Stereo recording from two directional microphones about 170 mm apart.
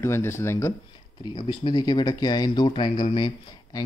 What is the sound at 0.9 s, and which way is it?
Speech, 25° left (ahead or behind).